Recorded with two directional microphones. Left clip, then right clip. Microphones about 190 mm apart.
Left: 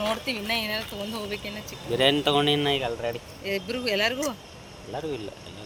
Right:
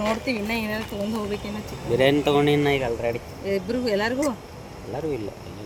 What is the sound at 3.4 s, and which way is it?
Speech, 25° right (ahead or behind).